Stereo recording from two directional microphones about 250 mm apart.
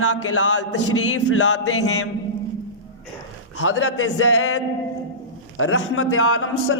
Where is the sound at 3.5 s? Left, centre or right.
Left.